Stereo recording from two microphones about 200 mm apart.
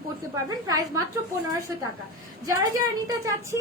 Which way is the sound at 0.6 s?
20° right (ahead or behind).